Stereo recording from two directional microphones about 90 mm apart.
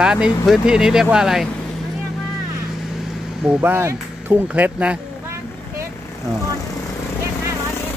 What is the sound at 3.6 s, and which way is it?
Speech, 25° right (ahead or behind).